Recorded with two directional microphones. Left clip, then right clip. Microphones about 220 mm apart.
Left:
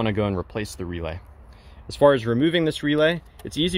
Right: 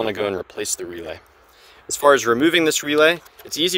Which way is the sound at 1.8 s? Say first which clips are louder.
Right 3 dB; 35° right (ahead or behind).